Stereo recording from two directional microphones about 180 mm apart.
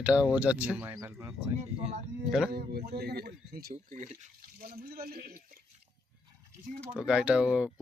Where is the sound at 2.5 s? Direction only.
60° right (ahead or behind); by 4.3 s 40° right (ahead or behind).